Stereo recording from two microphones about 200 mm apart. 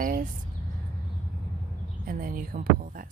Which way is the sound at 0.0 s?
45° right (ahead or behind).